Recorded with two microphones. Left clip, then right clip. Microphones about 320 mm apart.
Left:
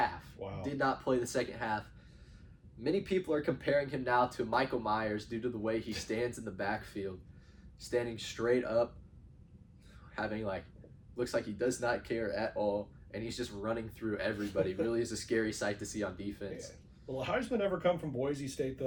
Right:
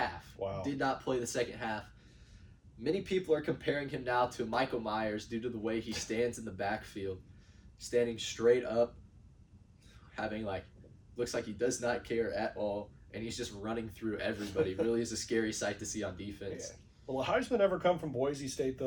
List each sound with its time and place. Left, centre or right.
0.6 s speech: centre
2.8 s speech: centre
10.2 s speech: centre
17.2 s speech: centre